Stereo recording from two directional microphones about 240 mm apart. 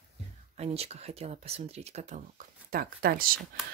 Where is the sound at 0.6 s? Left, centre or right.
Right.